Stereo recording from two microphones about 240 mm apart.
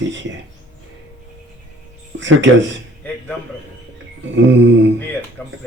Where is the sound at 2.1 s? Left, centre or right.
Right.